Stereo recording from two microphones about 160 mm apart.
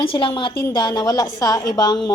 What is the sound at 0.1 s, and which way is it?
A woman's voice, 30° left (ahead or behind).